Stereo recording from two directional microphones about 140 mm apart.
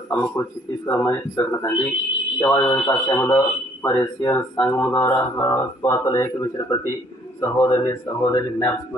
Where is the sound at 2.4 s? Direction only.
25° left (ahead or behind).